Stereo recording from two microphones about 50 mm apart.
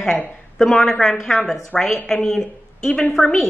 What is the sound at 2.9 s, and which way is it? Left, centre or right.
Speech, left.